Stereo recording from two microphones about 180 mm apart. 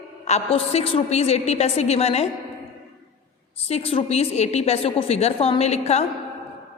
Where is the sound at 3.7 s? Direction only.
35° left (ahead or behind).